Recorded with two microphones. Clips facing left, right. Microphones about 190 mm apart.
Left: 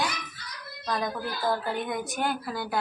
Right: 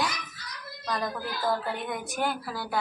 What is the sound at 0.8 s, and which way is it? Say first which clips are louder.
Speech: left 1 dB; centre (ahead or behind).